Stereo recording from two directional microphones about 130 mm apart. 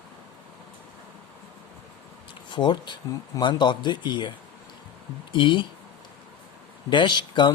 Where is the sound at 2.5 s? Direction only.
35° left (ahead or behind).